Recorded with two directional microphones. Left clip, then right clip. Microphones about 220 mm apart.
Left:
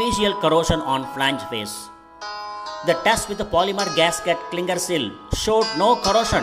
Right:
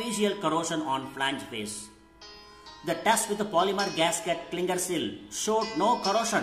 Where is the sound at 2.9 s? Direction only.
35° left (ahead or behind).